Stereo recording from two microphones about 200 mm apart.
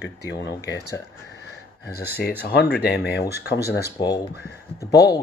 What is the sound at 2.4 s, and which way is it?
Speech, 55° left (ahead or behind).